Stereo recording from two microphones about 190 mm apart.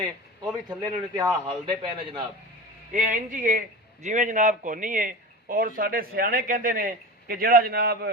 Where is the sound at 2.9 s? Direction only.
40° right (ahead or behind).